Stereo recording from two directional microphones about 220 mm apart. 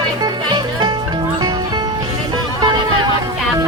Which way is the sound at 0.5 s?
20° right (ahead or behind).